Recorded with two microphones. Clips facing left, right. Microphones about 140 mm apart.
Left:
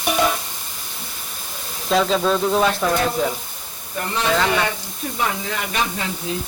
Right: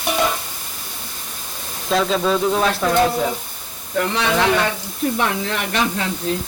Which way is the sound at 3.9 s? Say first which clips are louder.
Right 4 dB; 75° right (ahead or behind).